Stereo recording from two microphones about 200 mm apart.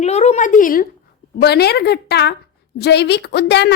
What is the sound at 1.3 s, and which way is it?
A woman's voice, 55° left (ahead or behind).